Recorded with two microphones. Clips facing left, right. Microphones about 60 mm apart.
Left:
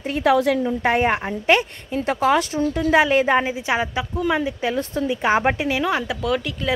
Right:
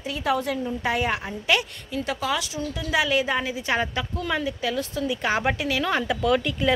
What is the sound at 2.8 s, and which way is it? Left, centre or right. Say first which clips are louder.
Speech: left 6 dB; left.